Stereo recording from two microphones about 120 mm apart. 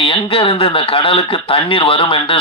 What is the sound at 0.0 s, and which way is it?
A man's voice, 50° left (ahead or behind).